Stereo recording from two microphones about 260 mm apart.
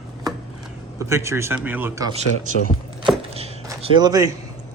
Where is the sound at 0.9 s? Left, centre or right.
Centre.